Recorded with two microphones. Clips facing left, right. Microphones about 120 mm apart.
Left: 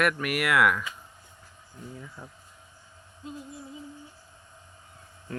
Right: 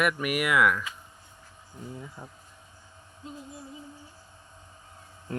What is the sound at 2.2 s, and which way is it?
Speech, 25° right (ahead or behind).